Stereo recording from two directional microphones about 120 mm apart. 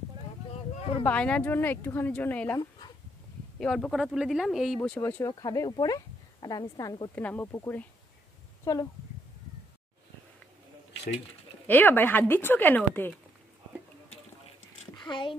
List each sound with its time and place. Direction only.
0.5 s a sound: 50° left (ahead or behind)
1.0 s speech: 10° left (ahead or behind)
3.5 s speech: 5° left (ahead or behind)
5.0 s speech: 20° left (ahead or behind)
5.3 s speech: 30° left (ahead or behind)
7.2 s speech: 15° left (ahead or behind)
8.7 s speech: 30° left (ahead or behind)
11.6 s speech: 15° left (ahead or behind)
15.0 s a child's voice: 40° left (ahead or behind)